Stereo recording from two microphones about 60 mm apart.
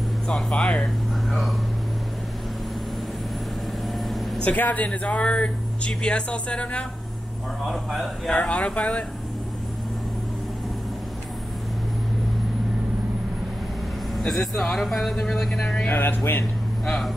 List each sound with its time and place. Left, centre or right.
0.3 s speech: centre
4.5 s speech: left
7.6 s a man's voice: centre
8.3 s speech: centre
14.2 s speech: centre
15.6 s speech: centre
15.9 s speech: left